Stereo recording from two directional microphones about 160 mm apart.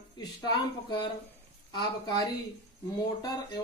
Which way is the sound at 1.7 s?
25° left (ahead or behind).